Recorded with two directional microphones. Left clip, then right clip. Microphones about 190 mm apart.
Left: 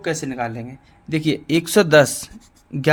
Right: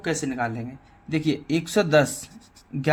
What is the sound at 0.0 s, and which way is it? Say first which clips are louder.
Speech: left 2 dB; 25° left (ahead or behind).